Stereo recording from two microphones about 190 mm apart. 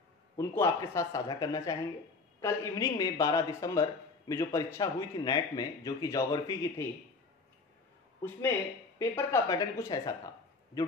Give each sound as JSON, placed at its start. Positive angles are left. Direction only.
{"t": 0.4, "sound": "speech", "side_deg": 15}
{"t": 8.9, "sound": "speech", "side_deg": 15}